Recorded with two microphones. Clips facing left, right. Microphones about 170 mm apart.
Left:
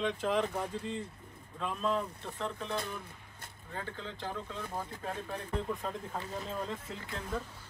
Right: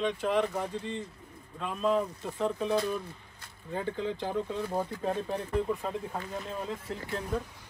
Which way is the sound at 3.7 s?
15° right (ahead or behind).